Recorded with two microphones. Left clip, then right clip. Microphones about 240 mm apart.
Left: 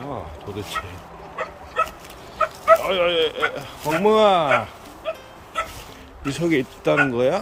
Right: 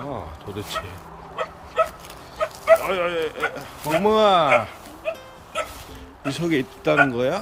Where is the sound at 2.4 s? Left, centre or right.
Right.